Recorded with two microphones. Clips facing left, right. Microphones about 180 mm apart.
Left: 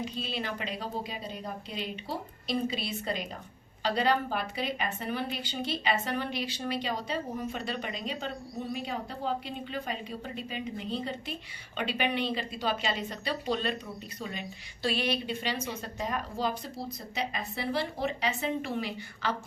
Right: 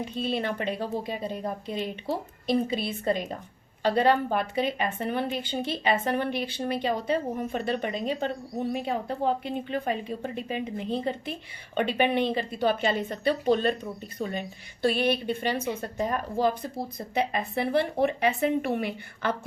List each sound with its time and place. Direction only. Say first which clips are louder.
0.0 s a woman's voice: right 6 dB; 55° right (ahead or behind)